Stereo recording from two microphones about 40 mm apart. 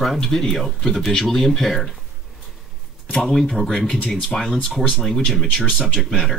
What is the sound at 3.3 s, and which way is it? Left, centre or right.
Speech, centre.